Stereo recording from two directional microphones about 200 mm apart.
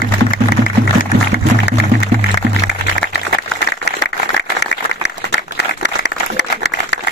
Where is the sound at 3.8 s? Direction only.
60° left (ahead or behind).